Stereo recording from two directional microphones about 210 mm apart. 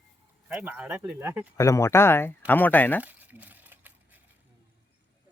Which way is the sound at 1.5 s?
15° left (ahead or behind).